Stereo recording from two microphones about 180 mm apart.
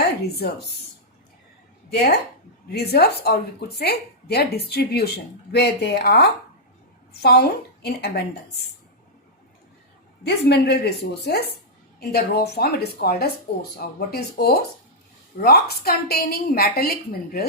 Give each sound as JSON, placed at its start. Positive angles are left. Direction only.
{"t": 0.0, "sound": "speech", "side_deg": 60}
{"t": 1.9, "sound": "a woman's voice", "side_deg": 65}
{"t": 10.2, "sound": "a woman's voice", "side_deg": 65}